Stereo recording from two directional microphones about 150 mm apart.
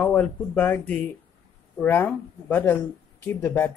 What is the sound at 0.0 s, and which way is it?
Speech, 10° left (ahead or behind).